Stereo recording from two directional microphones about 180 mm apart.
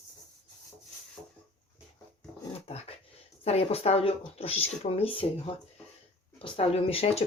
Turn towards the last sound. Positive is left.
turn(degrees=30)  # may be behind; listen again after turning